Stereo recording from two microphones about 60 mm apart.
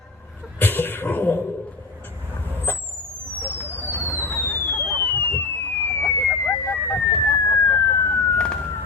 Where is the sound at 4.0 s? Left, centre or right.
Left.